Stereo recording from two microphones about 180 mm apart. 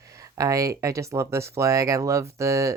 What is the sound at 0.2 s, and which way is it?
Speech, 20° right (ahead or behind).